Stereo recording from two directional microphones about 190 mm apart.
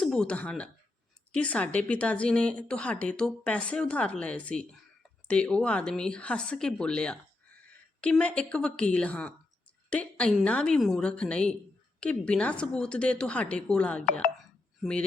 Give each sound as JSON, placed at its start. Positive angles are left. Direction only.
{"t": 0.0, "sound": "speech", "side_deg": 5}
{"t": 14.0, "sound": "speech", "side_deg": 45}